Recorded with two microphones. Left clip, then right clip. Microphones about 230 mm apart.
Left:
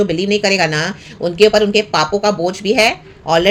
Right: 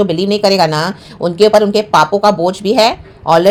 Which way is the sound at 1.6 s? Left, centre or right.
Right.